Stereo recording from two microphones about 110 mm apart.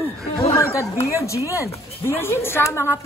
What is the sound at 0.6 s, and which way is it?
Speech, 25° left (ahead or behind).